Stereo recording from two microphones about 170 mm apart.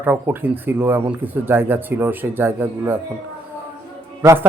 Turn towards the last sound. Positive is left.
turn(degrees=-15)  # may be behind; listen again after turning